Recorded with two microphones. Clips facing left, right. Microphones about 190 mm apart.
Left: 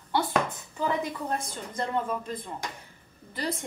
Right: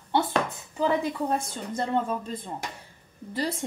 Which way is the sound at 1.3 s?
30° right (ahead or behind).